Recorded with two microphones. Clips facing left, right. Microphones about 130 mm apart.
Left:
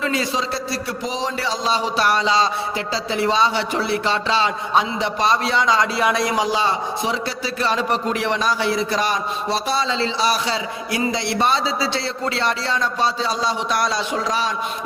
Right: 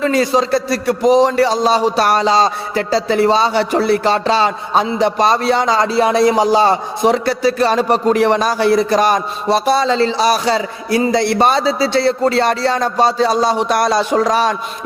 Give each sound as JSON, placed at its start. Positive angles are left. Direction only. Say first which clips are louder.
{"t": 0.0, "sound": "a man's voice", "louder": "right 8 dB", "side_deg": -45}